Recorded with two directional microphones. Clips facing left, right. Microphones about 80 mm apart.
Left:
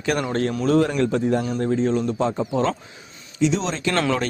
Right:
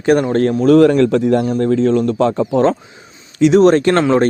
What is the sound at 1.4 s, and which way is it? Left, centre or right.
Speech, right.